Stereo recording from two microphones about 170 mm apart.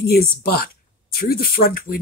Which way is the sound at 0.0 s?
65° left (ahead or behind).